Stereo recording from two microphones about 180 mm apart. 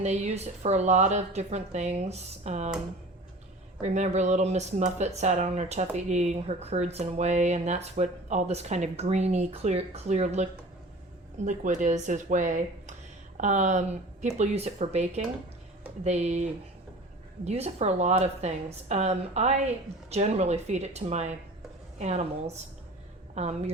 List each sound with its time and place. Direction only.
0.0 s speech: 40° right (ahead or behind)
3.8 s speech: 40° right (ahead or behind)